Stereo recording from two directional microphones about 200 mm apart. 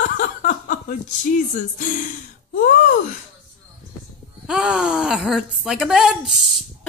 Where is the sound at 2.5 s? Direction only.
40° left (ahead or behind).